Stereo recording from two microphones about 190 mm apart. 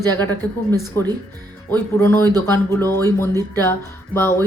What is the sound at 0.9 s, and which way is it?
Speech, 10° left (ahead or behind).